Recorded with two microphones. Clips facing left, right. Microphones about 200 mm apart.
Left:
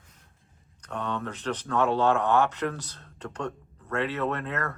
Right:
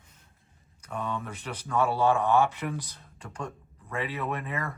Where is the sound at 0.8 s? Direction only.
10° right (ahead or behind).